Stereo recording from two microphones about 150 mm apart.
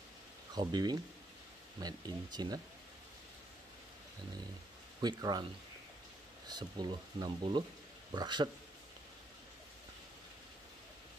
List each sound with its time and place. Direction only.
0.6 s speech: 30° right (ahead or behind)
5.0 s speech: 30° right (ahead or behind)
6.4 s speech: 30° right (ahead or behind)